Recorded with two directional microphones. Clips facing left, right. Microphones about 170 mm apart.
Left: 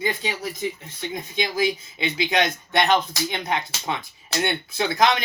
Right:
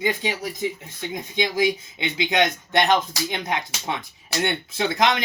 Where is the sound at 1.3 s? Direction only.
20° right (ahead or behind).